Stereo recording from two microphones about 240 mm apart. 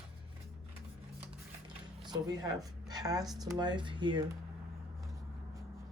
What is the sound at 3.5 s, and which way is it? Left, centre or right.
Speech, centre.